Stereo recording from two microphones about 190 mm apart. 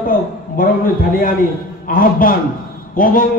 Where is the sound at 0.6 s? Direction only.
50° left (ahead or behind).